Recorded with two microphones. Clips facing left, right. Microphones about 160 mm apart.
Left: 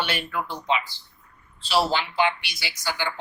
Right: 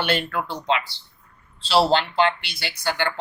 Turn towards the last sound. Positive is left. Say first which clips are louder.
# right 4 dB
turn(degrees=-65)  # may be behind; listen again after turning